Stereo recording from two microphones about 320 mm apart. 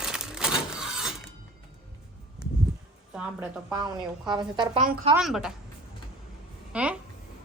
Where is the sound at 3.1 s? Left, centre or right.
Centre.